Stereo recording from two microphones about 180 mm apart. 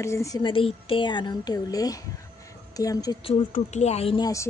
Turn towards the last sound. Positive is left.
turn(degrees=35)  # may be behind; listen again after turning